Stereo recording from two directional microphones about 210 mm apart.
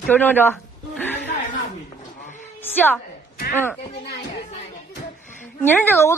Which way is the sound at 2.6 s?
10° left (ahead or behind).